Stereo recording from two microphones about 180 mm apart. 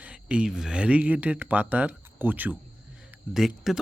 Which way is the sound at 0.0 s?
5° right (ahead or behind).